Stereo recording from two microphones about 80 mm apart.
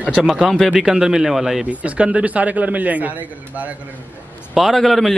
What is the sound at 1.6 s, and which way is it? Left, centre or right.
A man's voice, centre.